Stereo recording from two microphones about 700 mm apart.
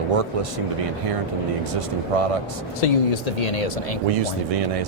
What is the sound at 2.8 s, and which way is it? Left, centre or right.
Speech, left.